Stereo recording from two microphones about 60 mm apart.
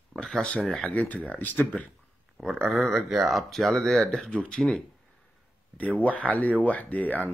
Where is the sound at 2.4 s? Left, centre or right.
Centre.